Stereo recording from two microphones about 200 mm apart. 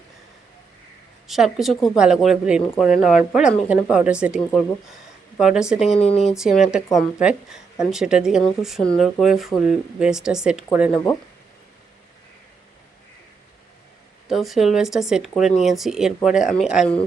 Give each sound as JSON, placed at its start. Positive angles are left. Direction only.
{"t": 1.3, "sound": "speech", "side_deg": 0}
{"t": 5.9, "sound": "speech", "side_deg": 30}
{"t": 6.3, "sound": "speech", "side_deg": 0}
{"t": 14.3, "sound": "speech", "side_deg": 0}